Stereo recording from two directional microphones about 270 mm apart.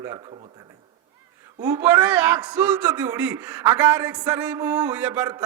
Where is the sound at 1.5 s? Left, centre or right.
Centre.